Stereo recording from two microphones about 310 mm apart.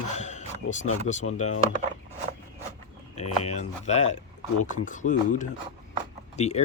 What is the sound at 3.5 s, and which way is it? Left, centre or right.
Speech, left.